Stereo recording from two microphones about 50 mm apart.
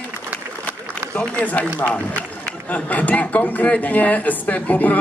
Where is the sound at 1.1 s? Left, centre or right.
Left.